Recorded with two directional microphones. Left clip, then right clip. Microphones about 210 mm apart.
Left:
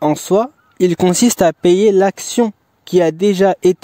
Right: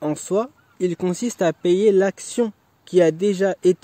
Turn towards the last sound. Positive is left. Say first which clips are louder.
# left 6 dB
turn(degrees=50)  # may be behind; listen again after turning